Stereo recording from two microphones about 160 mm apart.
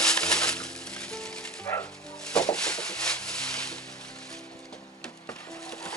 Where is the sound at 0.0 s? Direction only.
5° left (ahead or behind).